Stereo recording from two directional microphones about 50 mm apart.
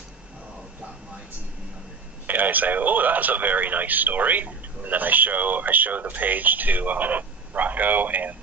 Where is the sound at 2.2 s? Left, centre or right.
Right.